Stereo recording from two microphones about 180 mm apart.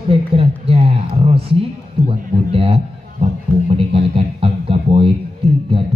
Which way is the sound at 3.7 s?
30° right (ahead or behind).